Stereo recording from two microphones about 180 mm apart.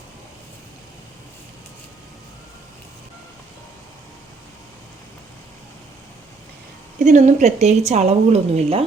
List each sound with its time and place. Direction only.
7.0 s a woman's voice: 40° right (ahead or behind)